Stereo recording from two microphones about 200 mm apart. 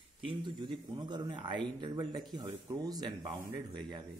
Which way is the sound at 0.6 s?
20° right (ahead or behind).